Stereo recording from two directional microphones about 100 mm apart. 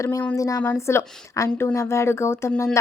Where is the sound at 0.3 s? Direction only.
35° left (ahead or behind).